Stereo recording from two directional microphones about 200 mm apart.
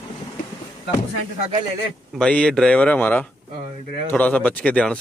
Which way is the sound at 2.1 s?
5° left (ahead or behind).